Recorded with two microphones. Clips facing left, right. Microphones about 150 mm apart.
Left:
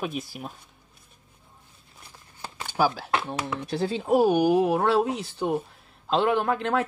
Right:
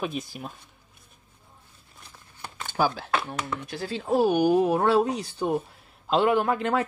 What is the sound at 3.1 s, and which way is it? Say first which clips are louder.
Speech: left 1 dB; 15° left (ahead or behind).